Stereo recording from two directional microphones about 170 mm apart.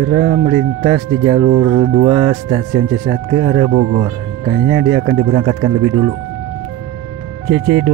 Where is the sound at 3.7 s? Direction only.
40° right (ahead or behind).